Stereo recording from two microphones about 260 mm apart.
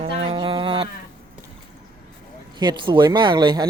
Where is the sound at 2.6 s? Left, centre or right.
Centre.